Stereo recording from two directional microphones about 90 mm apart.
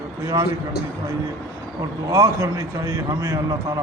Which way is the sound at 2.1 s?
35° right (ahead or behind).